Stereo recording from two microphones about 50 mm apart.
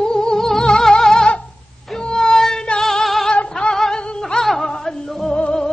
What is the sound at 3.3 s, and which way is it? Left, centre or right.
Music, centre.